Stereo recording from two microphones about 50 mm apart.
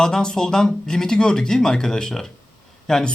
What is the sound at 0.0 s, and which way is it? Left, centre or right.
Speech, centre.